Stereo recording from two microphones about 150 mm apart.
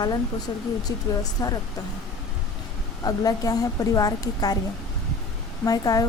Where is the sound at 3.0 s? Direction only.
25° left (ahead or behind).